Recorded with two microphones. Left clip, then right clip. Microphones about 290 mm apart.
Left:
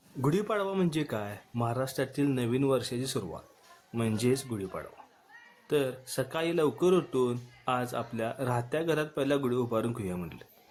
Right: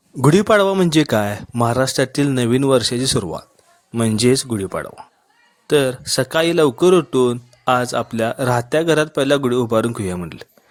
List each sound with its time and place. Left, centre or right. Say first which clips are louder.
0.2 s speech: right 16 dB; left